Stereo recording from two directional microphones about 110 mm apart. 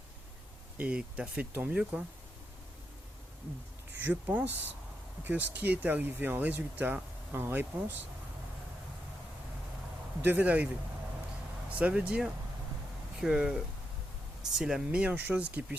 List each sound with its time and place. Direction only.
0.8 s speech: 10° right (ahead or behind)
4.0 s speech: 15° right (ahead or behind)
10.2 s speech: 15° right (ahead or behind)
11.7 s speech: 10° right (ahead or behind)
14.6 s speech: 10° right (ahead or behind)